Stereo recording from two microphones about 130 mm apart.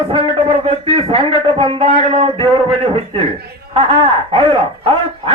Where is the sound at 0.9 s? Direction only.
45° right (ahead or behind).